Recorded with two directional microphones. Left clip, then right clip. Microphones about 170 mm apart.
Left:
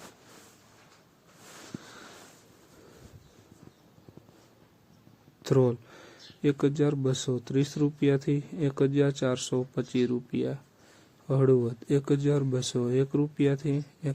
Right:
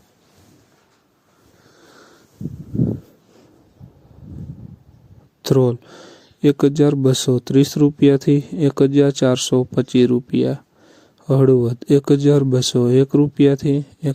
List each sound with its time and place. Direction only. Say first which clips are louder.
5.4 s speech: right 9 dB; 45° right (ahead or behind)